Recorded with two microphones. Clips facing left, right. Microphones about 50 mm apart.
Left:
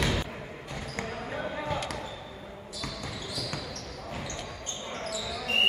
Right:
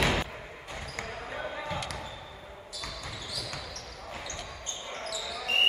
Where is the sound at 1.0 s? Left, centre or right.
Centre.